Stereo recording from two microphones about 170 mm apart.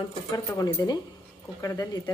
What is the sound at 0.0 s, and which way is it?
Speech, 20° left (ahead or behind).